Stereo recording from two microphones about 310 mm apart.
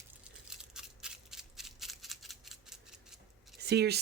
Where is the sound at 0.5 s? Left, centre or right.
Centre.